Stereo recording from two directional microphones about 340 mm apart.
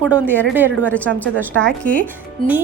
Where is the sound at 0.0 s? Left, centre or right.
Centre.